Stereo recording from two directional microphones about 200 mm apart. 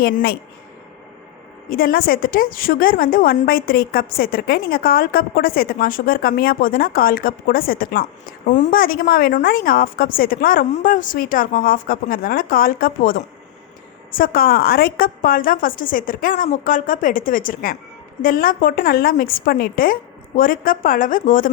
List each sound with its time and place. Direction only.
0.0 s a woman's voice: 50° left (ahead or behind)
1.7 s a woman's voice: 45° left (ahead or behind)